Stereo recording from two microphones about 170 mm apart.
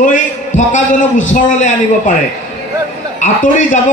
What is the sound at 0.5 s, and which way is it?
Speech, 90° left.